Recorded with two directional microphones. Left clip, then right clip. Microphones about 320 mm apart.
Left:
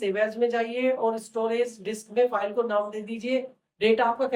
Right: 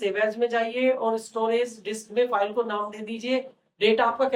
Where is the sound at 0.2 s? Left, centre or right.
Centre.